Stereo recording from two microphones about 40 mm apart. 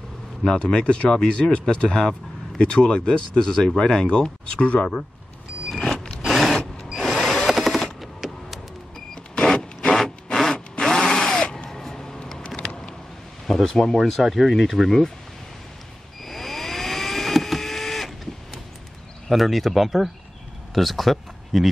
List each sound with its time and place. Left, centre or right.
0.6 s speech: left
3.1 s speech: centre
5.8 s vehicle: centre
6.5 s a sound: centre
7.0 s a sound: centre
7.4 s machine gun: centre
9.1 s power windows: centre
9.8 s a sound: centre
11.6 s crow: centre
13.5 s a sound: centre
13.9 s speech: centre
16.3 s power windows: centre
19.2 s speech: centre